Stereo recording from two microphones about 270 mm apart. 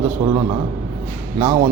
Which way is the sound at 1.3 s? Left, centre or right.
Centre.